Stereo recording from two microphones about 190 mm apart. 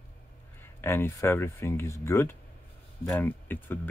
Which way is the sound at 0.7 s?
10° left (ahead or behind).